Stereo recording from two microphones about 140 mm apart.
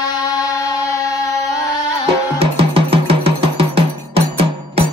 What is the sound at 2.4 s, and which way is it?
Music, 45° right (ahead or behind).